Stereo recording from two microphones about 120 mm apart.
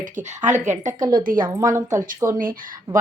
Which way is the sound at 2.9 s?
40° right (ahead or behind).